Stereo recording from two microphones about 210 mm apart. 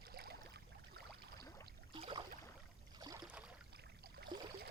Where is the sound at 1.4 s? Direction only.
15° left (ahead or behind).